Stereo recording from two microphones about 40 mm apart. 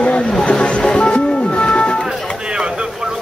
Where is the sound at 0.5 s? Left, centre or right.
Left.